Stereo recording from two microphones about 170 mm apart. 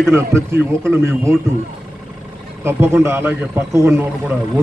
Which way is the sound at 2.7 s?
15° right (ahead or behind).